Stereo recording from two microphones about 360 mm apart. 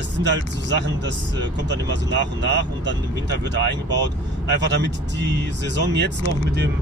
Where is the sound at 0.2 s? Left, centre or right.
Right.